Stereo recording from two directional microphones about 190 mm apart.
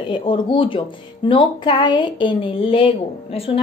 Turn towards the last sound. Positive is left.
turn(degrees=30)  # may be behind; listen again after turning